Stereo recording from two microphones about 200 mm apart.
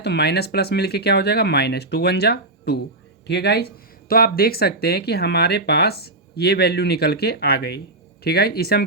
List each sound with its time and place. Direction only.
0.0 s speech: 55° left (ahead or behind)